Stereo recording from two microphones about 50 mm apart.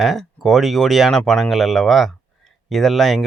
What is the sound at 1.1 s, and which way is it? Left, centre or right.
Speech, centre.